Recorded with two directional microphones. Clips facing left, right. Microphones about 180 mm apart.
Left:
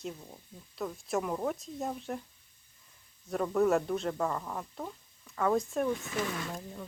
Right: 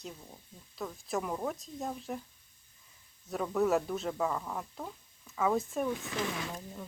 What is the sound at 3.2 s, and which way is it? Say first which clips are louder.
Speech: left 2 dB; centre (ahead or behind).